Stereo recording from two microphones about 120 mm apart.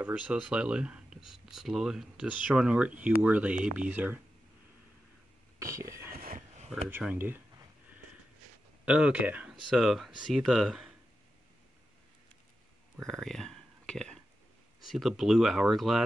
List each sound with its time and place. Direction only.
0.0 s speech: 10° right (ahead or behind)
5.6 s speech: 25° right (ahead or behind)
6.3 s a sound: 70° right (ahead or behind)
7.0 s speech: 15° right (ahead or behind)
8.8 s speech: 10° right (ahead or behind)
13.0 s a sound: 5° left (ahead or behind)
14.9 s speech: centre (ahead or behind)